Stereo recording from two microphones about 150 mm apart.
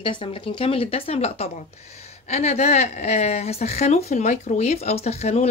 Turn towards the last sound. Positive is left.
turn(degrees=45)  # may be behind; listen again after turning